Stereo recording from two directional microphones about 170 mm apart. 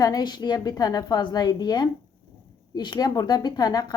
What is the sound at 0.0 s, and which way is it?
A woman's voice, 25° left (ahead or behind).